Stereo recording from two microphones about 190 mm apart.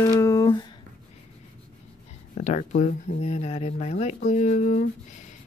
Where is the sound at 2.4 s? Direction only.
40° left (ahead or behind).